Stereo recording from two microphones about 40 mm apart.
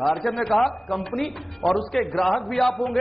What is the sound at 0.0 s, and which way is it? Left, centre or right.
A man's voice, centre.